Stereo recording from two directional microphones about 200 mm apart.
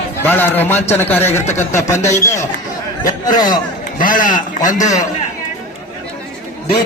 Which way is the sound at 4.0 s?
40° left (ahead or behind).